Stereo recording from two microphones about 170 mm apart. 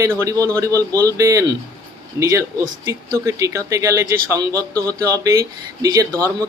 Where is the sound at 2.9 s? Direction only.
20° right (ahead or behind).